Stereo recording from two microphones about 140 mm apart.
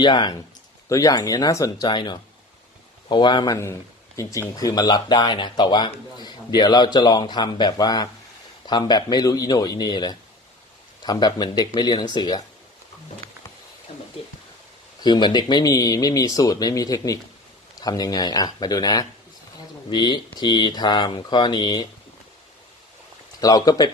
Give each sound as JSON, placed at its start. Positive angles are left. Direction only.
{"t": 0.0, "sound": "speech", "side_deg": 30}
{"t": 13.9, "sound": "a sound", "side_deg": 45}
{"t": 15.0, "sound": "speech", "side_deg": 30}
{"t": 23.4, "sound": "speech", "side_deg": 25}